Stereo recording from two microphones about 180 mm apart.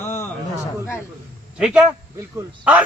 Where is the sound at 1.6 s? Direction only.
5° right (ahead or behind).